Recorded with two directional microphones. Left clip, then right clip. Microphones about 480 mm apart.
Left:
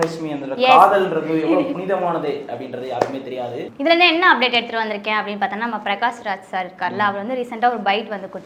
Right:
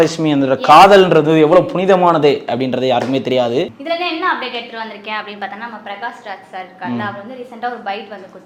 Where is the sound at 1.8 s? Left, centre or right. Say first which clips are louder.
Right 10 dB; right.